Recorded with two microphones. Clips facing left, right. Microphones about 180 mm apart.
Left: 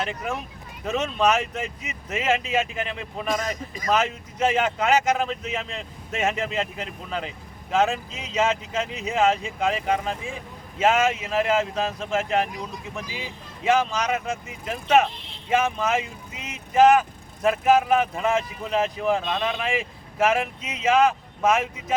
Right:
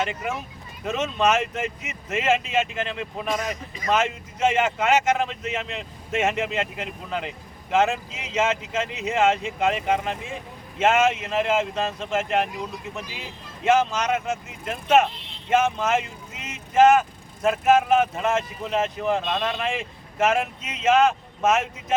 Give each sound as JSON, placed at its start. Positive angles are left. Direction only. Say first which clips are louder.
{"t": 0.1, "sound": "speech", "louder": "even", "side_deg": -5}
{"t": 13.7, "sound": "speech", "louder": "right 1 dB", "side_deg": -5}